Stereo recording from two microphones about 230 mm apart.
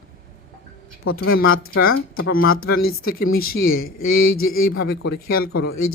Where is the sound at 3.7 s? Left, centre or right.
Left.